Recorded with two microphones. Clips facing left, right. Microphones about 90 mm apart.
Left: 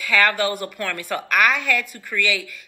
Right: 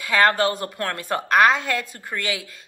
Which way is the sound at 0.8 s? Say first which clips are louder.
Right 2 dB; 20° right (ahead or behind).